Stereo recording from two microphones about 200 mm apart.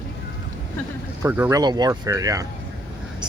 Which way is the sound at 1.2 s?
15° right (ahead or behind).